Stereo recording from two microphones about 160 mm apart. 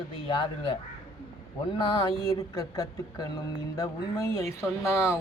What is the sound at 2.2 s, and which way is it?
Speech, 20° left (ahead or behind).